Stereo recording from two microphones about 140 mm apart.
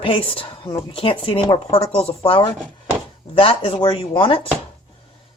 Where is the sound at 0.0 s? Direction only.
40° left (ahead or behind).